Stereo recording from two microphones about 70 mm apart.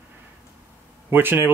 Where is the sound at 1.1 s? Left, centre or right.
Right.